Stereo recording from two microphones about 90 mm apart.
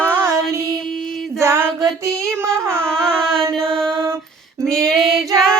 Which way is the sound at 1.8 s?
40° right (ahead or behind).